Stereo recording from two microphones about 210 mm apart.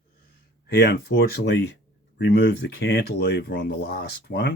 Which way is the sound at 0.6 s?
50° left (ahead or behind).